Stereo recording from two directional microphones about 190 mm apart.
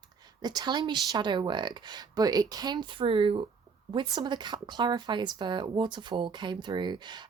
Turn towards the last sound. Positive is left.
turn(degrees=-25)  # may be behind; listen again after turning